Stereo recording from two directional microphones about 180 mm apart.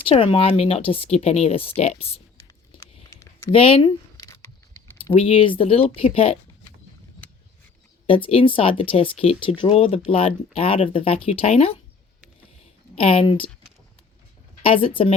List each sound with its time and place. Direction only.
0.0 s speech: 30° left (ahead or behind)
3.1 s a sound: 15° left (ahead or behind)
3.5 s speech: 30° left (ahead or behind)
5.1 s speech: 30° left (ahead or behind)
8.0 s speech: 30° left (ahead or behind)
13.0 s speech: 30° left (ahead or behind)
14.6 s speech: 30° left (ahead or behind)